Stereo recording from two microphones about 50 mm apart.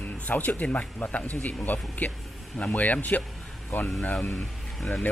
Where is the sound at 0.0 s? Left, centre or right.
Left.